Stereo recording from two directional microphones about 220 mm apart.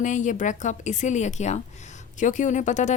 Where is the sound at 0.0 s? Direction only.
35° left (ahead or behind).